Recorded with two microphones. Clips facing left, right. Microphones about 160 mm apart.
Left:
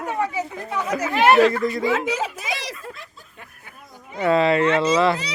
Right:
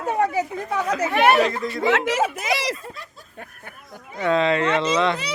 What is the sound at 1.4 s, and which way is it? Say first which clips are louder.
Speech: left 5 dB; 15° right (ahead or behind).